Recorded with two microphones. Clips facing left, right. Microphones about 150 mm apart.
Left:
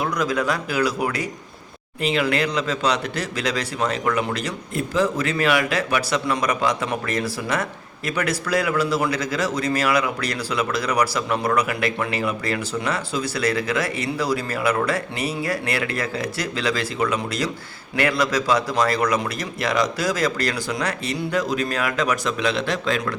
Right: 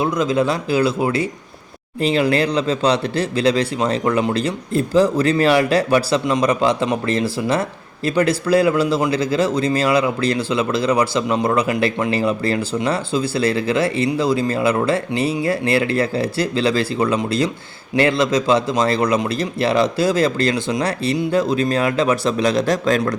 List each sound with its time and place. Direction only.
0.0 s speech: 25° right (ahead or behind); by 23.1 s 40° right (ahead or behind)